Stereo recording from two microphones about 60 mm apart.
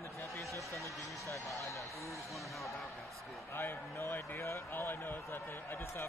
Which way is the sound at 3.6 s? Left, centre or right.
Left.